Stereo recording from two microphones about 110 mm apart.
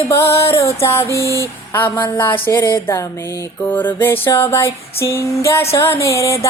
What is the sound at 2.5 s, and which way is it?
Music, 30° left (ahead or behind).